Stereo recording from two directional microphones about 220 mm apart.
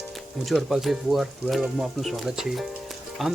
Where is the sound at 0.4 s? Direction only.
Centre (ahead or behind).